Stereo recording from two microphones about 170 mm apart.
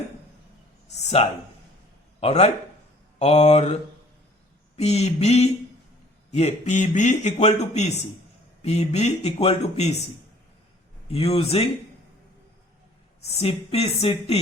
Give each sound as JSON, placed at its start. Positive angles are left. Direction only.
{"t": 1.2, "sound": "speech", "side_deg": 35}
{"t": 4.8, "sound": "a man's voice", "side_deg": 40}
{"t": 11.1, "sound": "speech", "side_deg": 35}
{"t": 13.4, "sound": "speech", "side_deg": 35}